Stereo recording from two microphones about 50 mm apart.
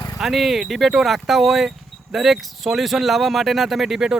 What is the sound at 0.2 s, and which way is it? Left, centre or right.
Speech, centre.